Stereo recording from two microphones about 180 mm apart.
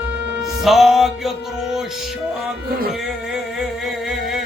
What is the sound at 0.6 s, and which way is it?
Music, centre (ahead or behind).